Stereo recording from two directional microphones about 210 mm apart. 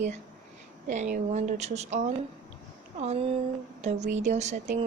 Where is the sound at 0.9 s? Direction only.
35° right (ahead or behind).